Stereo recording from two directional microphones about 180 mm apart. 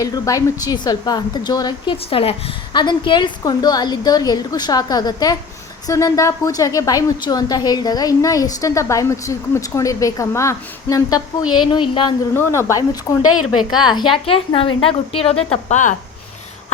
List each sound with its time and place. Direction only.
0.0 s a woman's voice: 20° left (ahead or behind)
12.3 s a woman's voice: 15° left (ahead or behind); by 16.0 s 40° left (ahead or behind)